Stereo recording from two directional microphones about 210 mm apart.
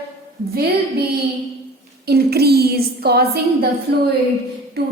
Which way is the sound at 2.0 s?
50° right (ahead or behind).